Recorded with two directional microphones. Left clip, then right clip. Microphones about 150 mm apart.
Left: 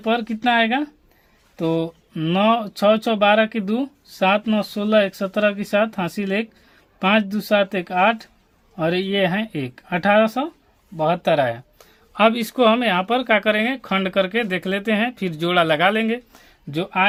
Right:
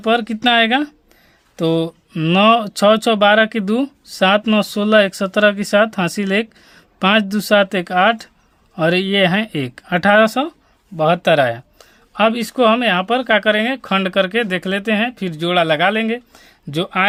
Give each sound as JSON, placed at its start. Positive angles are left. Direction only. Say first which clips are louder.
{"t": 0.0, "sound": "speech", "louder": "right 5 dB", "side_deg": -45}
{"t": 11.8, "sound": "speech", "louder": "right 1 dB", "side_deg": -25}
{"t": 16.7, "sound": "speech", "louder": "right 2 dB", "side_deg": -45}